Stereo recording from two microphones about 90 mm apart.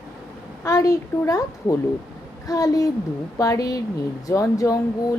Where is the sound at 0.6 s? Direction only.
40° left (ahead or behind).